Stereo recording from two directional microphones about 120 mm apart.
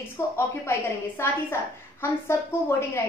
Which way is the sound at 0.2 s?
25° left (ahead or behind).